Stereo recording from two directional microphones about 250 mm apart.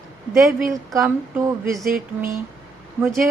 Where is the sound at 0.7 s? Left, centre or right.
Centre.